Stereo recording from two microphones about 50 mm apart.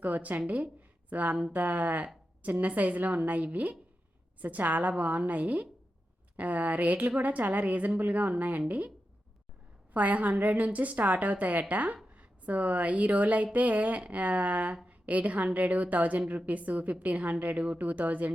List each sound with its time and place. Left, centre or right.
0.0 s a woman's voice: right
9.9 s a woman's voice: right